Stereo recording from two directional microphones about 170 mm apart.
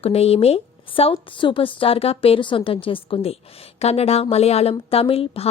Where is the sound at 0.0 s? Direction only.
35° left (ahead or behind).